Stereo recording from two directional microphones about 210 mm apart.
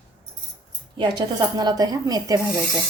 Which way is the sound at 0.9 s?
20° right (ahead or behind).